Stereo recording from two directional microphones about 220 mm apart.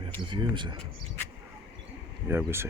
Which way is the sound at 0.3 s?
20° right (ahead or behind).